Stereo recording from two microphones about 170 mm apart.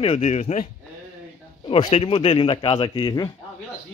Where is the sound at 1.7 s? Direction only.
35° left (ahead or behind).